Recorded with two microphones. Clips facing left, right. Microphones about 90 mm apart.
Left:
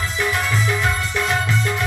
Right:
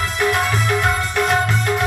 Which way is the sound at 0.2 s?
55° right (ahead or behind).